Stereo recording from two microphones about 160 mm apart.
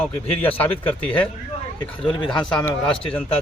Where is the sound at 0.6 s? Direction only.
10° left (ahead or behind).